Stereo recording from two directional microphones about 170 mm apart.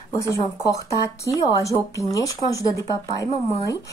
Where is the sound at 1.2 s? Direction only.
20° left (ahead or behind).